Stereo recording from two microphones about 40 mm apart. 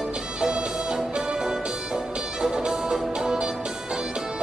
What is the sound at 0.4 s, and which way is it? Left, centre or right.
Music, centre.